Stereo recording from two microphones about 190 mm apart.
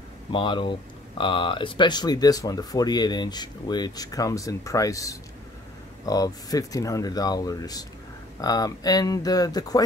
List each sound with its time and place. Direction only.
0.3 s speech: 25° left (ahead or behind)